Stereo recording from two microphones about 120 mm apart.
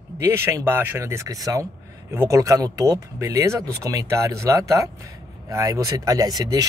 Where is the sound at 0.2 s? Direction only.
20° right (ahead or behind).